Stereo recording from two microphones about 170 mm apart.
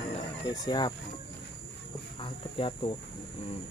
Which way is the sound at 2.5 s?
30° left (ahead or behind).